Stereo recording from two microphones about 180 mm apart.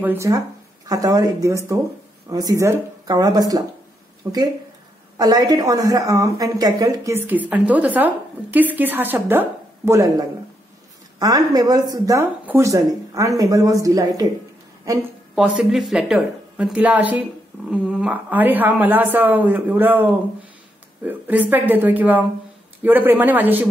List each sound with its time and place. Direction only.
0.0 s a woman's voice: 15° right (ahead or behind)
15.3 s a woman's voice: 5° right (ahead or behind)